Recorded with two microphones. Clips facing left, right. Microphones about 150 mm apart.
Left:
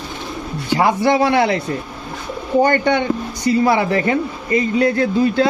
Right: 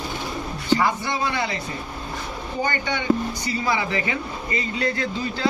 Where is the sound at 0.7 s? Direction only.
70° left (ahead or behind).